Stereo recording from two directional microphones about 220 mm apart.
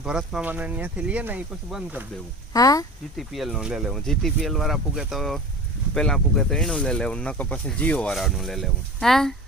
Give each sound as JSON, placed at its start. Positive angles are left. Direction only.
{"t": 0.0, "sound": "speech", "side_deg": -5}
{"t": 2.5, "sound": "speech", "side_deg": 15}
{"t": 3.2, "sound": "speech", "side_deg": 0}